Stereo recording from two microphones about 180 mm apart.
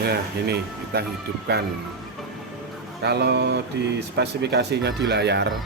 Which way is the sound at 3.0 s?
65° right (ahead or behind).